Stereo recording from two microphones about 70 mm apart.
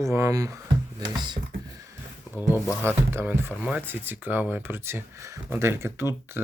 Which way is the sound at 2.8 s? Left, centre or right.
Right.